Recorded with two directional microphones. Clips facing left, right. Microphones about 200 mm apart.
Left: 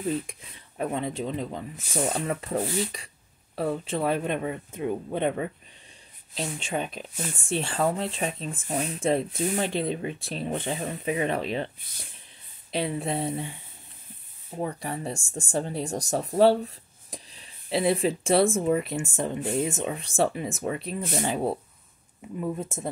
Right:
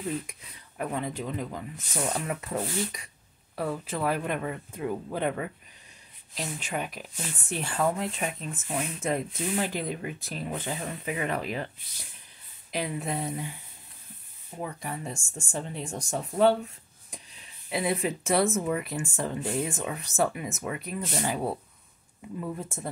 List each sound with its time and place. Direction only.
0.3 s speech: 25° left (ahead or behind)
12.7 s speech: 30° left (ahead or behind)
14.6 s speech: 30° left (ahead or behind)